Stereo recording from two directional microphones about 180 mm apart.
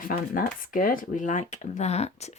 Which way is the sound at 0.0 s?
50° left (ahead or behind).